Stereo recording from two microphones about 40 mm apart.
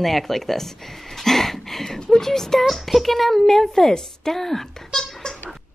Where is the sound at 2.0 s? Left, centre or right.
Centre.